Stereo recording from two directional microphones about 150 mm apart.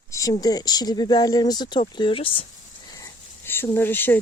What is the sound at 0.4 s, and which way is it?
Speech, 25° left (ahead or behind).